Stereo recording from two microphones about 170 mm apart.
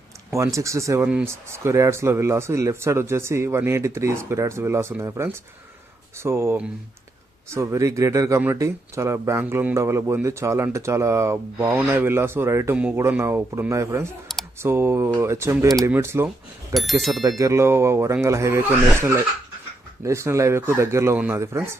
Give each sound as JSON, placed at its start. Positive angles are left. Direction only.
{"t": 0.3, "sound": "speech", "side_deg": -15}
{"t": 16.7, "sound": "speech", "side_deg": 0}
{"t": 17.2, "sound": "speech", "side_deg": -20}